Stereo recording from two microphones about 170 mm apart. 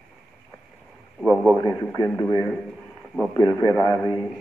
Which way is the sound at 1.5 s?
20° left (ahead or behind).